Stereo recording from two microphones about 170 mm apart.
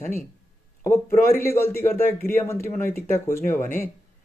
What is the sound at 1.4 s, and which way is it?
Speech, 15° left (ahead or behind).